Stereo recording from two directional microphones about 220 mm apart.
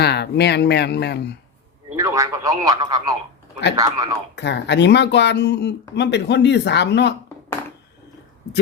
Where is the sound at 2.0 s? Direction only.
15° right (ahead or behind).